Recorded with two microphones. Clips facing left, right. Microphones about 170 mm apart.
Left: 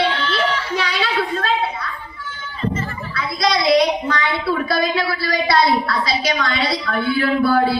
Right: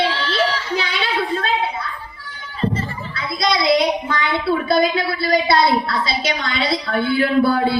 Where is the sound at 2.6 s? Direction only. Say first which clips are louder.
Right 1 dB; 30° right (ahead or behind).